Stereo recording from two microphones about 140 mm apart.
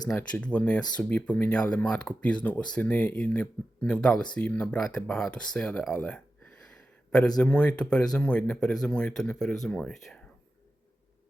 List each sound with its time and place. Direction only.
0.1 s speech: 10° left (ahead or behind)
7.4 s speech: 10° left (ahead or behind)